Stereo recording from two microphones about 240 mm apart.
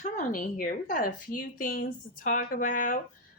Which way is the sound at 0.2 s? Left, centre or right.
Left.